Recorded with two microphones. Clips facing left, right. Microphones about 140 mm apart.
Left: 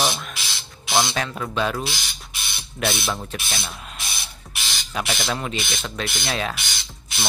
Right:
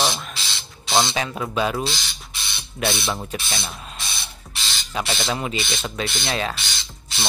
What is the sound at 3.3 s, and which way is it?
Spray, 20° right (ahead or behind).